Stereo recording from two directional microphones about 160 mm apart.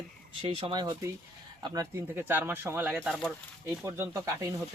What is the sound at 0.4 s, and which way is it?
A man's voice, 35° right (ahead or behind).